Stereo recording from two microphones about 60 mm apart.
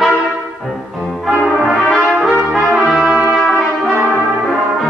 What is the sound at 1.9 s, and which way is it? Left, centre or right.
Brass instrument, centre.